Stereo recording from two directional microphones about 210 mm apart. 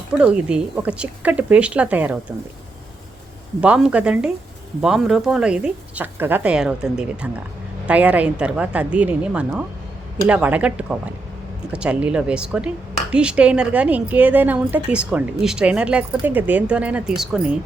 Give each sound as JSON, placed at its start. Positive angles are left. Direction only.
{"t": 0.2, "sound": "speech", "side_deg": -5}
{"t": 3.6, "sound": "speech", "side_deg": -5}